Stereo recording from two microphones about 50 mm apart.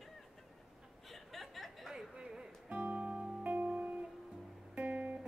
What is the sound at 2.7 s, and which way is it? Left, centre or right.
Music, right.